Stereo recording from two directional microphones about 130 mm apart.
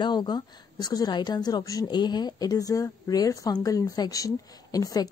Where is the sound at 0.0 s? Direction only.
35° left (ahead or behind).